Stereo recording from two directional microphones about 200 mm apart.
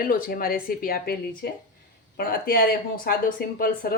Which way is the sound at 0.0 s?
45° left (ahead or behind).